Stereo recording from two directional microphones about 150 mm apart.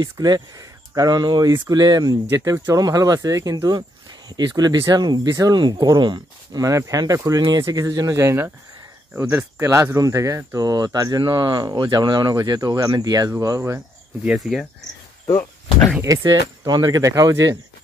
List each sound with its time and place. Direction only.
0.0 s speech: 25° right (ahead or behind)
14.2 s speech: 5° right (ahead or behind)
15.2 s speech: 20° left (ahead or behind)
16.0 s speech: 20° right (ahead or behind)